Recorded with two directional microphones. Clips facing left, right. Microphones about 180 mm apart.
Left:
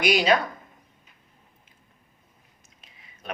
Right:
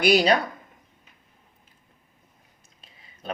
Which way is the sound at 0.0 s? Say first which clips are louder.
Right 2 dB; 40° right (ahead or behind).